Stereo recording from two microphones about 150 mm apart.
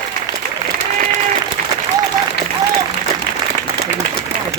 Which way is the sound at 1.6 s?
60° right (ahead or behind).